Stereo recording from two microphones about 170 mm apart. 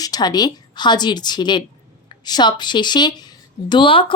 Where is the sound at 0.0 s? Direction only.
25° left (ahead or behind).